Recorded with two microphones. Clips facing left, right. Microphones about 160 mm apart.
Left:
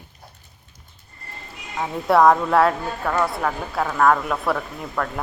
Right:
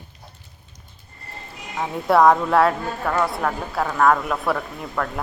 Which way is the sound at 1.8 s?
Centre (ahead or behind).